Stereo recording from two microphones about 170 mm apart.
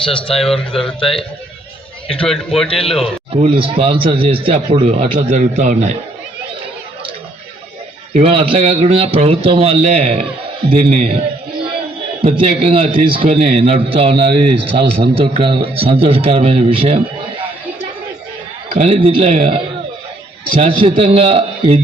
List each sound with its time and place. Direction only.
0.0 s a man's voice: 30° left (ahead or behind)
2.2 s a man's voice: centre (ahead or behind)
2.6 s a man's voice: 35° left (ahead or behind)
3.3 s a man's voice: 30° right (ahead or behind)
8.1 s a man's voice: 35° right (ahead or behind)
12.2 s a man's voice: 30° right (ahead or behind)
18.7 s a man's voice: 35° right (ahead or behind)